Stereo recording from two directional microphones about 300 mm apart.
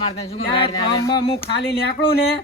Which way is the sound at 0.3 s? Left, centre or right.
Centre.